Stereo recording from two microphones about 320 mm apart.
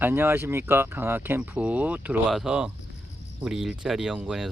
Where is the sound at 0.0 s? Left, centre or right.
Centre.